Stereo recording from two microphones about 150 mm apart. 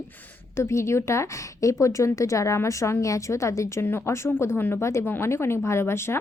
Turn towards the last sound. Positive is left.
turn(degrees=15)  # may be behind; listen again after turning